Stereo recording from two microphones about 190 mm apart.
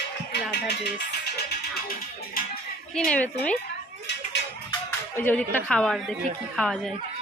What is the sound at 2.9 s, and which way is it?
Speech, 5° left (ahead or behind).